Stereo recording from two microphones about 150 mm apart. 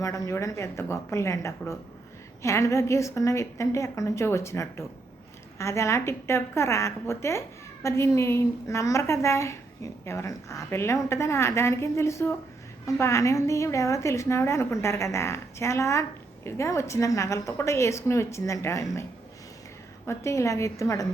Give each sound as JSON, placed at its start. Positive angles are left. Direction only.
{"t": 0.0, "sound": "a woman's voice", "side_deg": 20}
{"t": 20.1, "sound": "a woman's voice", "side_deg": 20}